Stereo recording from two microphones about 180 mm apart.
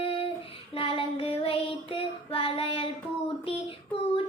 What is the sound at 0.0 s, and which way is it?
Child singing, 30° left (ahead or behind).